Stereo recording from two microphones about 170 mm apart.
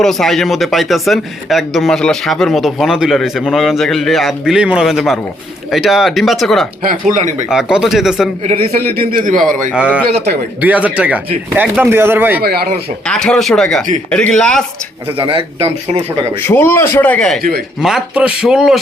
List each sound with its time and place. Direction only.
0.0 s speech: centre (ahead or behind)
7.1 s a man's voice: 45° right (ahead or behind)
7.5 s speech: 5° right (ahead or behind)
8.4 s a man's voice: 35° right (ahead or behind)
9.0 s a man's voice: 55° right (ahead or behind)
9.7 s speech: 5° right (ahead or behind)
12.4 s a man's voice: 65° right (ahead or behind)
13.1 s speech: 5° left (ahead or behind)
15.2 s a man's voice: 30° right (ahead or behind)
16.4 s a man's voice: 15° left (ahead or behind); by 18.8 s 5° right (ahead or behind)